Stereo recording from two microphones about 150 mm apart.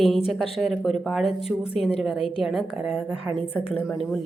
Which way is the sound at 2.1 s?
40° left (ahead or behind).